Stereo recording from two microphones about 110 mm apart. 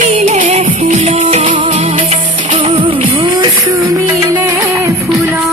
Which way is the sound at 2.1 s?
60° right (ahead or behind).